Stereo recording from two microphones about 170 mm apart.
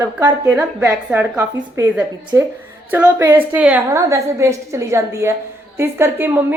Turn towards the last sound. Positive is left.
turn(degrees=-10)  # may be behind; listen again after turning